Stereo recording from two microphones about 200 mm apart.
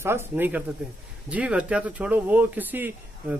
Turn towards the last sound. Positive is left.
turn(degrees=-10)  # may be behind; listen again after turning